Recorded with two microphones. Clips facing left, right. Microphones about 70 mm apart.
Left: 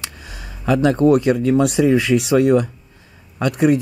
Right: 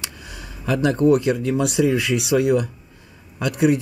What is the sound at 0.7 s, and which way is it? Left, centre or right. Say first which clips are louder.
Speech: left 2 dB; left.